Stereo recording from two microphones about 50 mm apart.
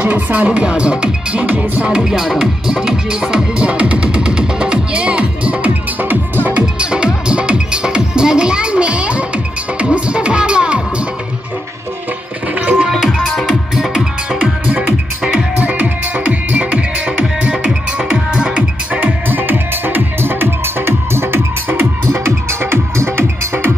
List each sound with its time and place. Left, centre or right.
0.0 s speech: right
0.5 s speech: centre
3.5 s music: right
6.6 s music: centre
12.5 s music: right
12.9 s music: centre; by 23.7 s right